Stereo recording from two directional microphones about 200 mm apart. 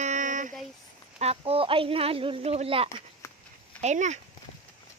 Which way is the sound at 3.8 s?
35° right (ahead or behind).